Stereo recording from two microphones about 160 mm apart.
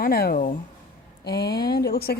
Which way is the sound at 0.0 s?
70° left (ahead or behind).